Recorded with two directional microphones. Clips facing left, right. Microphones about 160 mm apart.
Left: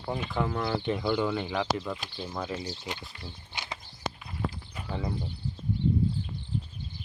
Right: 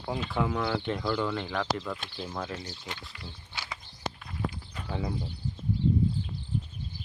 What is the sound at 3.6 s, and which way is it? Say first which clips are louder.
Walk: left 1 dB; 20° left (ahead or behind).